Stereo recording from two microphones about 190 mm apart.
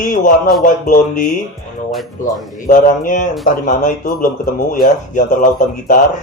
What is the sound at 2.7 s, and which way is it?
Speech, 45° left (ahead or behind).